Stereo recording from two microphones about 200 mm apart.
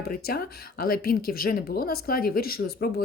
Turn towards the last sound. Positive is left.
turn(degrees=50)  # may be behind; listen again after turning